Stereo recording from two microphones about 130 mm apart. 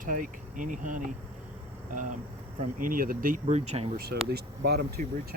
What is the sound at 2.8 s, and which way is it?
Speech, 90° right.